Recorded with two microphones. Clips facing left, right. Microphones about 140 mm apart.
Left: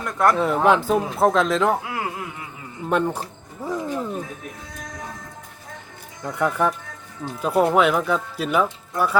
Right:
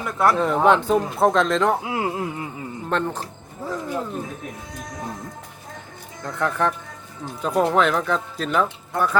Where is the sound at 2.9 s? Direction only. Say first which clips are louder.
Left 3 dB; 10° left (ahead or behind).